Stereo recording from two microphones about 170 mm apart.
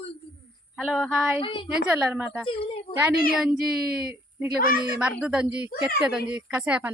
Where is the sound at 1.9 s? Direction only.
10° right (ahead or behind).